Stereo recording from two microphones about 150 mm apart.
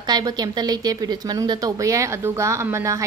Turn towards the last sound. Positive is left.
turn(degrees=-20)  # may be behind; listen again after turning